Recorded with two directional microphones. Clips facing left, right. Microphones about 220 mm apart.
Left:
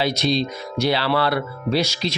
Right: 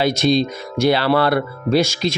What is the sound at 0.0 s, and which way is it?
Speech, 50° right (ahead or behind).